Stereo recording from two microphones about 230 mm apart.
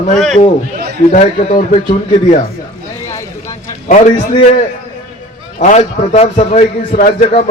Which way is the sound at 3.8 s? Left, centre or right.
Left.